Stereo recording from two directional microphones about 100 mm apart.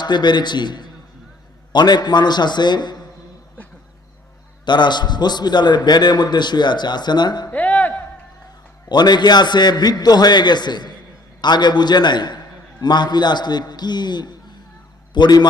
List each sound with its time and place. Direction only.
0.0 s a man's voice: 50° left (ahead or behind)
4.6 s a man's voice: 50° left (ahead or behind)
7.5 s music: 15° left (ahead or behind)
8.9 s a man's voice: 45° left (ahead or behind)